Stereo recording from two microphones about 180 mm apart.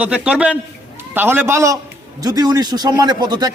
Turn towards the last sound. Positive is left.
turn(degrees=-25)  # may be behind; listen again after turning